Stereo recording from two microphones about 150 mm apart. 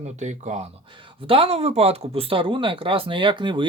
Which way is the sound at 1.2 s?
40° right (ahead or behind).